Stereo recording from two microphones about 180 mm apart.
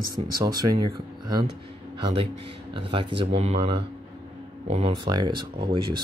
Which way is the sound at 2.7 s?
30° right (ahead or behind).